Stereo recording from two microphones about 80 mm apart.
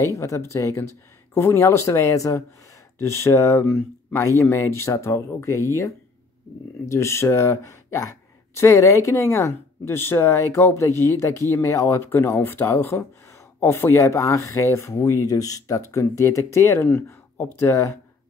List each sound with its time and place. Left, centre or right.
0.0 s speech: left
12.1 s speech: left
16.8 s speech: left